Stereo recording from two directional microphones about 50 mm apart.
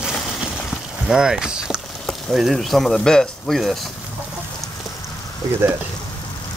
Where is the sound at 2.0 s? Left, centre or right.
Centre.